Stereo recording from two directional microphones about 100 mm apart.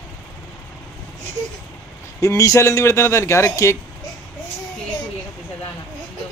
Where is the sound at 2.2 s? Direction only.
30° left (ahead or behind).